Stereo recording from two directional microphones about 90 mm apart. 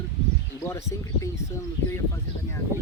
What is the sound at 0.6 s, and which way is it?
Speech, 30° left (ahead or behind).